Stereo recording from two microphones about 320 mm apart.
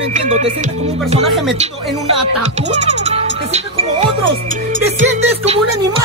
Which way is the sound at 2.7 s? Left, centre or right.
Right.